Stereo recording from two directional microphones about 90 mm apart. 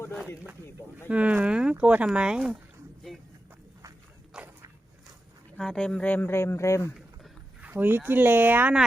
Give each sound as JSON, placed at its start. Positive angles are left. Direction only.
{"t": 0.9, "sound": "speech", "side_deg": -15}
{"t": 4.4, "sound": "walk", "side_deg": -10}
{"t": 5.5, "sound": "speech", "side_deg": 10}
{"t": 7.6, "sound": "speech", "side_deg": -20}